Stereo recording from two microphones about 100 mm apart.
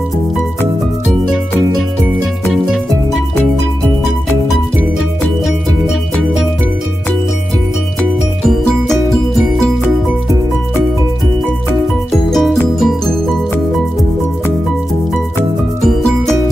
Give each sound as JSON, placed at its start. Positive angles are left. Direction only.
{"t": 12.3, "sound": "music", "side_deg": 0}